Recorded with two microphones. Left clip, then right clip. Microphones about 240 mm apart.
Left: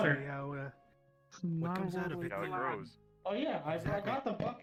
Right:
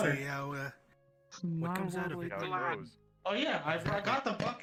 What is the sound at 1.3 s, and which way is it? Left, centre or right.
Speech, centre.